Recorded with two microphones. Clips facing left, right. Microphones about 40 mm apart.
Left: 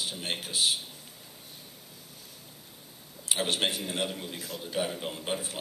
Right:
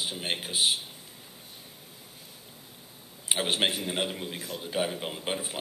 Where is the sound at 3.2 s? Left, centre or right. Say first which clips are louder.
Right 2 dB; centre.